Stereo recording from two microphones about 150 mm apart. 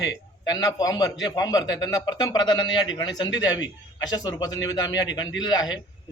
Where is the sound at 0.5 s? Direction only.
25° left (ahead or behind).